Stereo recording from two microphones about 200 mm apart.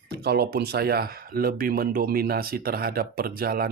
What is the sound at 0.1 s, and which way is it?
Speech, 55° right (ahead or behind).